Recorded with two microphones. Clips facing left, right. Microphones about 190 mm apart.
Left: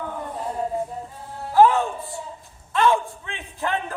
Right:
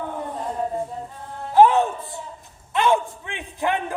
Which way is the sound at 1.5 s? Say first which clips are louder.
Right 1 dB; 20° right (ahead or behind).